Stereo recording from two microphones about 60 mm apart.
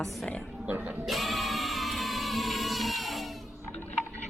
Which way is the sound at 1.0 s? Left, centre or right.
Centre.